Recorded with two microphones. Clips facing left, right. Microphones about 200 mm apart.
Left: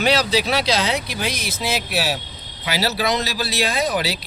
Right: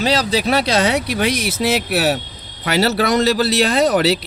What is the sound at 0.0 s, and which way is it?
Speech, 45° right (ahead or behind).